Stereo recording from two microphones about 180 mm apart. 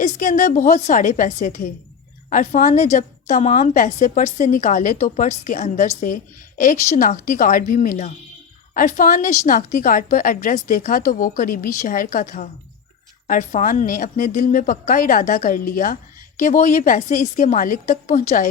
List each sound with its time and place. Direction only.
0.0 s a woman's voice: 45° left (ahead or behind)